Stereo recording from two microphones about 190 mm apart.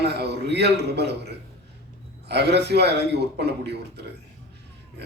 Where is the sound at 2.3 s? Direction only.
60° right (ahead or behind).